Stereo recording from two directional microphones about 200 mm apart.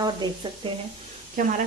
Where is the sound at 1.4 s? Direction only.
45° right (ahead or behind).